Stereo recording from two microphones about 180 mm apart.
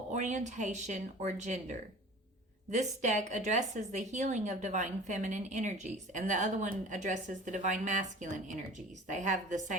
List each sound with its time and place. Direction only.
0.1 s speech: 40° right (ahead or behind)